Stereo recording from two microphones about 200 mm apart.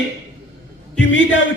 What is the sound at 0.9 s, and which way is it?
Speech, 65° left (ahead or behind).